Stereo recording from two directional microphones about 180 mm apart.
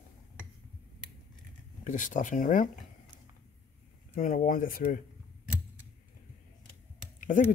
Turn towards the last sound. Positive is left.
turn(degrees=45)  # may be behind; listen again after turning